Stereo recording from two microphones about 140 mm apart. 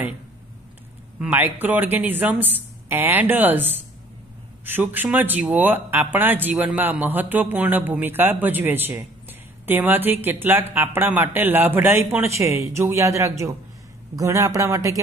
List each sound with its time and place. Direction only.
1.2 s speech: 15° right (ahead or behind)
4.6 s a man's voice: 15° right (ahead or behind)